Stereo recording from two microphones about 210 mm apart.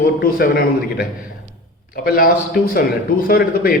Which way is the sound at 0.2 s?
45° left (ahead or behind).